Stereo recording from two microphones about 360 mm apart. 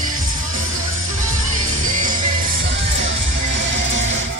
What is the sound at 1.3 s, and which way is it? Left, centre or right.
Music, right.